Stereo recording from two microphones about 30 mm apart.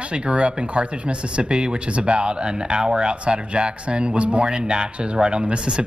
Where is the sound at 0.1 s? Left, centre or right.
Right.